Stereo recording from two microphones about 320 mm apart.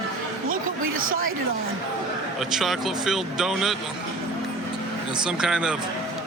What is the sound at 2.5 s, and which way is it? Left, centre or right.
Speech, centre.